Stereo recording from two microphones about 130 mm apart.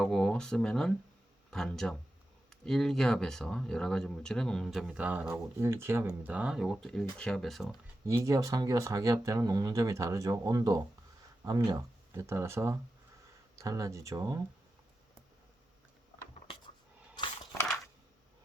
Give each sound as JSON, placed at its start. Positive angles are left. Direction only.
{"t": 0.0, "sound": "speech", "side_deg": 5}
{"t": 4.9, "sound": "speech", "side_deg": -10}
{"t": 5.5, "sound": "speech", "side_deg": -20}
{"t": 8.0, "sound": "speech", "side_deg": -25}